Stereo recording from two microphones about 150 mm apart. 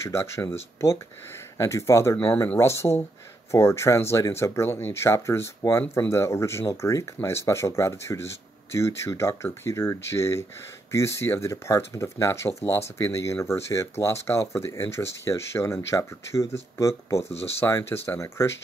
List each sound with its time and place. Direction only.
0.0 s speech: 20° left (ahead or behind)